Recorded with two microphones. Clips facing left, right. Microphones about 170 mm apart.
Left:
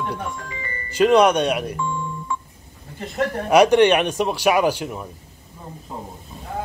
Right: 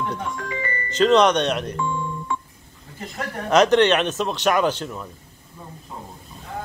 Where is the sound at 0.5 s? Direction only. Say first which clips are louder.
Right 6 dB; 70° right (ahead or behind).